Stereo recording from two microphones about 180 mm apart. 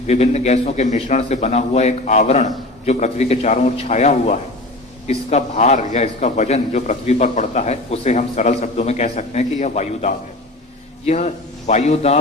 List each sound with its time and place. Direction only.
0.1 s a man's voice: 40° left (ahead or behind)